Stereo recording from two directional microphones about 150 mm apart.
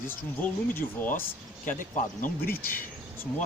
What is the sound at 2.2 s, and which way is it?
Speech, 80° left.